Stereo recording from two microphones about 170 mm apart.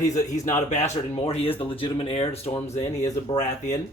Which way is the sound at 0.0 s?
45° left (ahead or behind).